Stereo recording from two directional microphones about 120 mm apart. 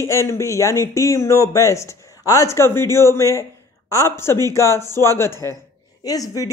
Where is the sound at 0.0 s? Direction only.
25° left (ahead or behind).